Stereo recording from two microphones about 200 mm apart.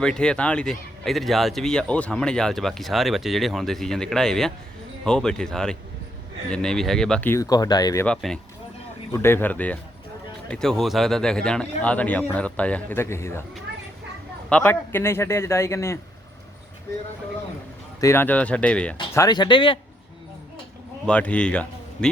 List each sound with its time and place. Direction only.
0.0 s a man's voice: 5° left (ahead or behind); by 8.0 s 20° left (ahead or behind)
8.0 s a man's voice: 5° left (ahead or behind)
14.5 s a man's voice: 10° left (ahead or behind)
18.0 s a man's voice: 10° left (ahead or behind)
19.1 s speech: 20° left (ahead or behind)
21.1 s a man's voice: 5° left (ahead or behind)